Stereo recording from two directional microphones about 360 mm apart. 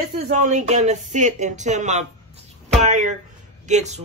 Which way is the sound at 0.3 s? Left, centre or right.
Centre.